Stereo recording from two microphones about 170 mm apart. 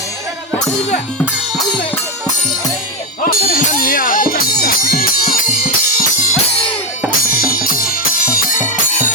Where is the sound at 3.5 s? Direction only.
60° left (ahead or behind).